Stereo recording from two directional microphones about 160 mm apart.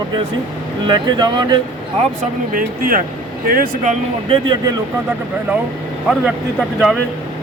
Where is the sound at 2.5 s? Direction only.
65° right (ahead or behind).